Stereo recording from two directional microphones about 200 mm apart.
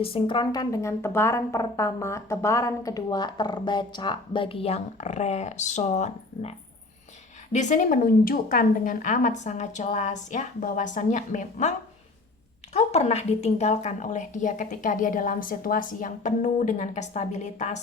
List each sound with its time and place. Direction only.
0.0 s speech: 25° left (ahead or behind)
7.5 s speech: 35° left (ahead or behind)
12.7 s speech: 30° left (ahead or behind)